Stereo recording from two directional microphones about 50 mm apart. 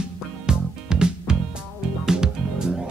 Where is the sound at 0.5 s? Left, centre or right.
Centre.